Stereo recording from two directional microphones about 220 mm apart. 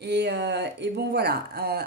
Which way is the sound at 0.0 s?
50° right (ahead or behind).